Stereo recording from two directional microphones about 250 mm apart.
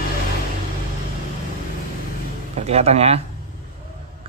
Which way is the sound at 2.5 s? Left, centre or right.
Right.